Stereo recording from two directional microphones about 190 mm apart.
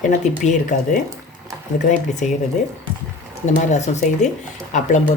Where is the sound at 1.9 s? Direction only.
40° left (ahead or behind).